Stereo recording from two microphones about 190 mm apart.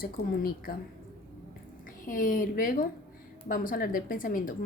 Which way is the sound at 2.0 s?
45° left (ahead or behind).